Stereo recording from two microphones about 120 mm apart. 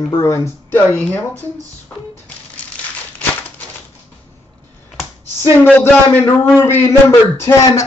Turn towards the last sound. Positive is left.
turn(degrees=25)  # may be behind; listen again after turning